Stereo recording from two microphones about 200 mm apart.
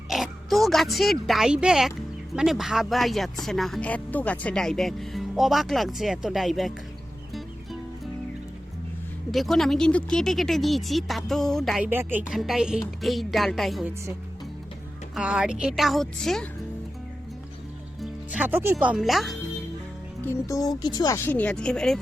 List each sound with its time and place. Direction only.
0.1 s speech: centre (ahead or behind)
9.3 s speech: centre (ahead or behind)
15.1 s speech: 5° right (ahead or behind)
18.0 s speech: 5° right (ahead or behind)
20.2 s speech: 15° left (ahead or behind)